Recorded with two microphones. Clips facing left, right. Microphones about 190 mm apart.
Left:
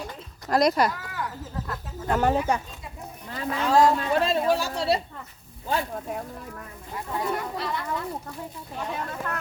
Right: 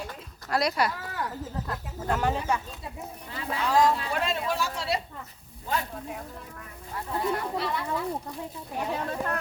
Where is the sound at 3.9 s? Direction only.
35° left (ahead or behind).